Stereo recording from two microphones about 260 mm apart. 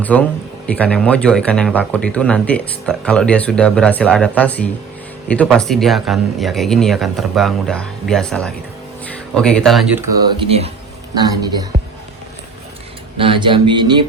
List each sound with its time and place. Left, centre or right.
0.0 s speech: centre
13.1 s speech: centre